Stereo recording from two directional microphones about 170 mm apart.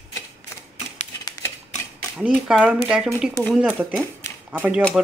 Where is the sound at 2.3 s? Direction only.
5° right (ahead or behind).